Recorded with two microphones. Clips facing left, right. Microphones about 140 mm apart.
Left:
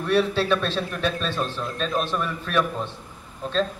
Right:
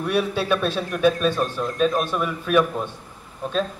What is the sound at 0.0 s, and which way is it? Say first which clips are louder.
A man's voice: left 1 dB; 10° right (ahead or behind).